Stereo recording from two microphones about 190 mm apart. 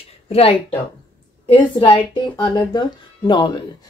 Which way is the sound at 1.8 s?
25° left (ahead or behind).